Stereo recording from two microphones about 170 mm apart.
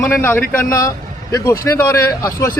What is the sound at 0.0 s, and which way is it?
A man's voice, 15° left (ahead or behind).